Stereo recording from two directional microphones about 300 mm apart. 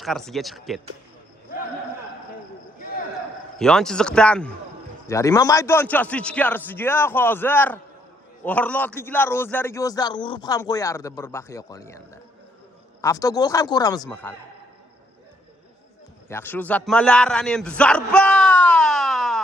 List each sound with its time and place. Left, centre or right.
0.0 s a man's voice: centre
3.6 s a man's voice: centre
16.3 s a man's voice: centre